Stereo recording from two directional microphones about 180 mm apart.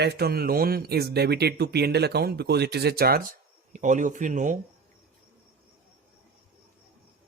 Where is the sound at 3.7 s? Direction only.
45° right (ahead or behind).